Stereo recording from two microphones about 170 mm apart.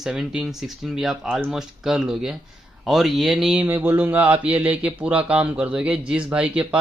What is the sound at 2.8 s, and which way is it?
Mantra, centre (ahead or behind).